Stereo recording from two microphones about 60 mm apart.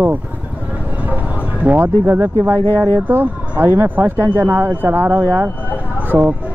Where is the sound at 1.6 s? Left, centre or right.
Right.